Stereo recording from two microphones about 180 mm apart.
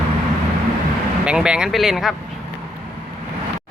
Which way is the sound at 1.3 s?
5° right (ahead or behind).